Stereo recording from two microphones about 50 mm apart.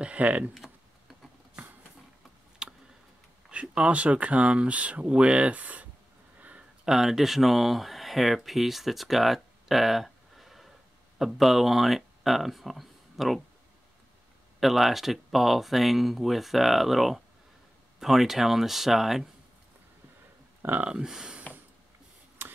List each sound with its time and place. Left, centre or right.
0.0 s typing: right
0.6 s typing: centre
2.6 s tick: centre
3.4 s speech: right
6.8 s speech: centre
14.6 s speech: centre
20.8 s speech: centre
22.4 s a sound: right